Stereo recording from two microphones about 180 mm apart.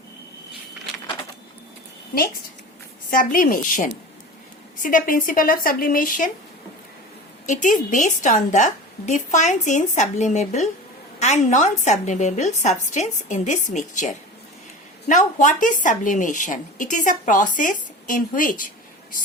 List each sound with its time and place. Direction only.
3.1 s speech: 50° left (ahead or behind)
7.4 s a woman's voice: 45° left (ahead or behind)